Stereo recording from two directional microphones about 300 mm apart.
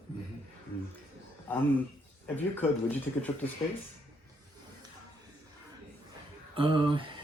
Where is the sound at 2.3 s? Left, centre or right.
Centre.